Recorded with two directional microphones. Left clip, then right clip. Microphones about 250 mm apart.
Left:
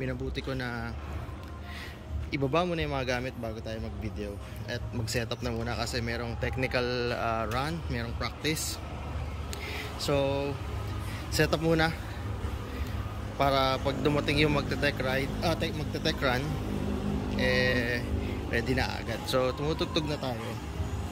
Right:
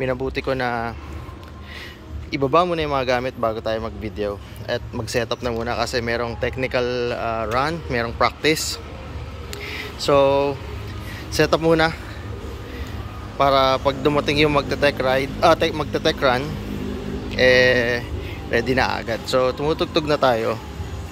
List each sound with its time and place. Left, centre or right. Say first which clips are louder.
0.0 s speech: right 12 dB; centre
2.3 s speech: right 11 dB; centre
9.7 s a sound: right 11 dB; centre
11.3 s speech: right 10 dB; centre
13.4 s speech: right 10 dB; centre